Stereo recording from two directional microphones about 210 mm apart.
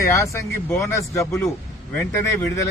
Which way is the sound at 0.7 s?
15° left (ahead or behind).